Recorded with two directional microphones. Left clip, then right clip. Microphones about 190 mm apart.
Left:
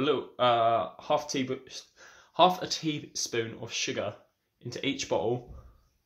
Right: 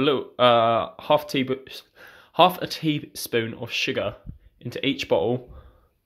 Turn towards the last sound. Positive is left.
turn(degrees=-45)  # may be behind; listen again after turning